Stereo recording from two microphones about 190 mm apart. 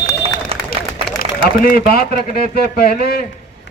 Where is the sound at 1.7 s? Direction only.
50° left (ahead or behind).